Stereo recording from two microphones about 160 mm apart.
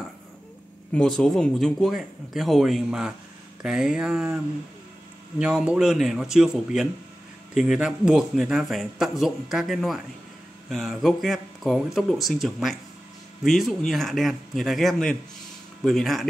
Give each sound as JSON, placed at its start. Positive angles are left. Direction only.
{"t": 0.9, "sound": "speech", "side_deg": 5}
{"t": 5.4, "sound": "speech", "side_deg": -5}